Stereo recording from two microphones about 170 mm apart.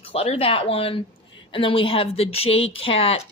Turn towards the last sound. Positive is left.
turn(degrees=35)  # may be behind; listen again after turning